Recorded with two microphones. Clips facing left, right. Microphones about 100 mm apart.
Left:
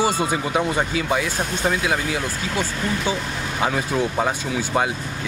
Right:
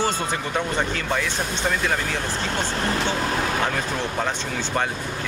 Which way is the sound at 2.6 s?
60° right (ahead or behind).